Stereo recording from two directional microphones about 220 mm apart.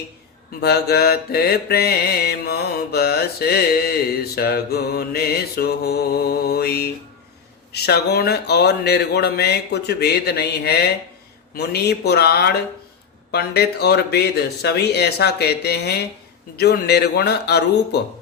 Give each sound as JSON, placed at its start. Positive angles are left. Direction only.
{"t": 0.6, "sound": "mantra", "side_deg": 45}